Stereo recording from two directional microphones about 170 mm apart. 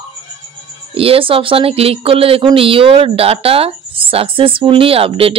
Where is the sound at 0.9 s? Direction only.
35° right (ahead or behind).